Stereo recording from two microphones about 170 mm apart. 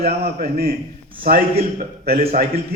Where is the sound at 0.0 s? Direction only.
60° right (ahead or behind).